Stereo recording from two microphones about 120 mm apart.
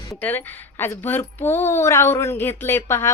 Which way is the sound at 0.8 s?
20° left (ahead or behind).